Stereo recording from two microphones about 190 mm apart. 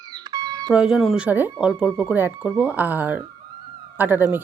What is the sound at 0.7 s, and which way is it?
Speech, 5° right (ahead or behind).